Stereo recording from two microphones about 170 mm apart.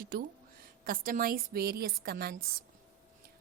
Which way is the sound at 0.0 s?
55° right (ahead or behind).